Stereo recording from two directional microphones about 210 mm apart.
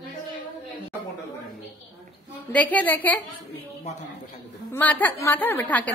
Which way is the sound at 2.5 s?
5° left (ahead or behind).